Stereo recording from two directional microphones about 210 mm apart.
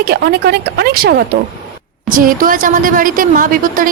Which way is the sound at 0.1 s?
50° right (ahead or behind).